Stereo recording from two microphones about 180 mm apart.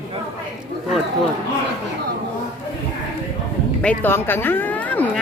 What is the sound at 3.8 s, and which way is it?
Speech, 10° left (ahead or behind).